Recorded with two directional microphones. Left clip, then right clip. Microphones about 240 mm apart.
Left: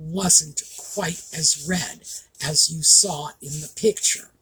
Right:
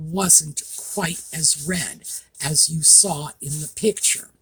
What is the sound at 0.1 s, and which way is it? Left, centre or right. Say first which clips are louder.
Speech: right 1 dB; right.